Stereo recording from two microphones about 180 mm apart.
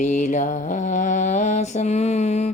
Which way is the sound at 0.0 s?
40° left (ahead or behind).